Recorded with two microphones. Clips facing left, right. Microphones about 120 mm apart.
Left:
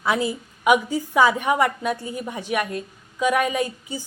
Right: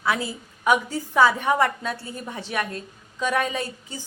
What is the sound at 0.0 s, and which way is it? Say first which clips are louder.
A woman's voice: left 3 dB; 20° left (ahead or behind).